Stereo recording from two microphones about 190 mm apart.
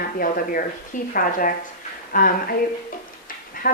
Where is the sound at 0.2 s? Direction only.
50° left (ahead or behind).